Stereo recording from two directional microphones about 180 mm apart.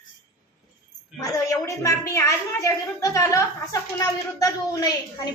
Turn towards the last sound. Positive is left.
turn(degrees=20)  # may be behind; listen again after turning